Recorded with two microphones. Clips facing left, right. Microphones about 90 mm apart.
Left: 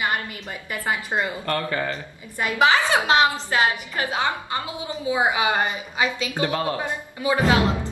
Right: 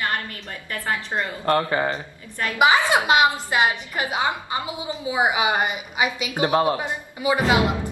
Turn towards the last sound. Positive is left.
turn(degrees=-15)  # may be behind; listen again after turning